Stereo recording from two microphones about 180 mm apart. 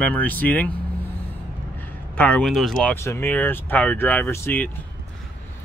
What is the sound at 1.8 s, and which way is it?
Speech, 10° left (ahead or behind).